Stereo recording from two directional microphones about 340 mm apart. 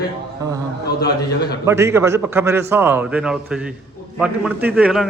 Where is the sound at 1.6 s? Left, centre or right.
Centre.